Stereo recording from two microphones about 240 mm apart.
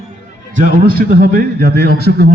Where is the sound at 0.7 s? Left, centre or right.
Right.